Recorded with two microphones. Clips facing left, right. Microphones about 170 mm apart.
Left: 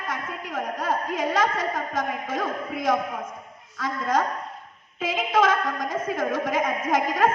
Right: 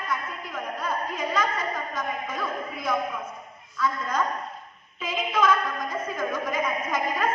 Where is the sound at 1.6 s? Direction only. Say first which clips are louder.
Left 3 dB; 90° left.